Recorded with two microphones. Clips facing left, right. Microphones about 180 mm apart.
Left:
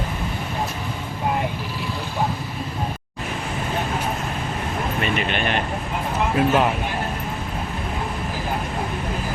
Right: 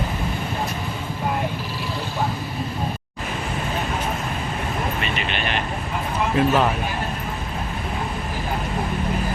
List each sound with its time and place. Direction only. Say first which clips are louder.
5.1 s vehicle: left 3 dB; 50° left (ahead or behind)
6.3 s speech: even; 5° left (ahead or behind)